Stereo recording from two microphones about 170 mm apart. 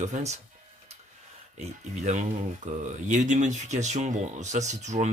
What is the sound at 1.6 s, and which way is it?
Speech, 45° right (ahead or behind).